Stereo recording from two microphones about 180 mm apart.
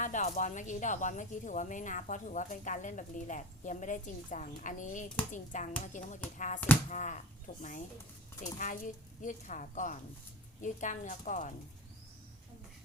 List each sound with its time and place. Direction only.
0.0 s a woman's voice: 40° left (ahead or behind)